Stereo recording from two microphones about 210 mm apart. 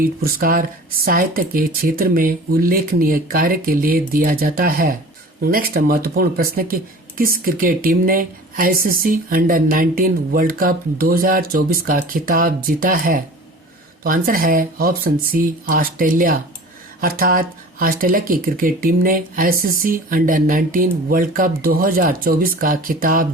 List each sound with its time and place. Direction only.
0.0 s speech: 45° right (ahead or behind)